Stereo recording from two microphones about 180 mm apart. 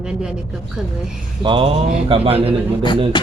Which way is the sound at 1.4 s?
30° right (ahead or behind).